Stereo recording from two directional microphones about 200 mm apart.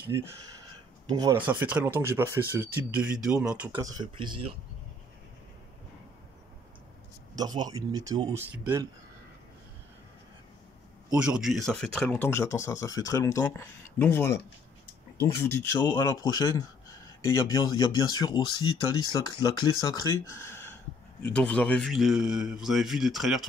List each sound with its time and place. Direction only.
0.1 s speech: 15° right (ahead or behind)
1.4 s speech: 10° right (ahead or behind)
3.8 s speech: 20° right (ahead or behind)
7.3 s speech: 20° right (ahead or behind)
11.1 s a man's voice: 5° right (ahead or behind); by 14.3 s 10° left (ahead or behind)
15.3 s a man's voice: 10° left (ahead or behind)